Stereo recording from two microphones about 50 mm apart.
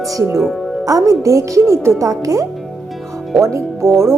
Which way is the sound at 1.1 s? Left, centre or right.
Right.